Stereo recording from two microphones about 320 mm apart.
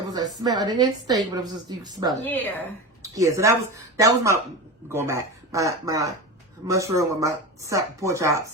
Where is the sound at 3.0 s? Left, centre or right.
Centre.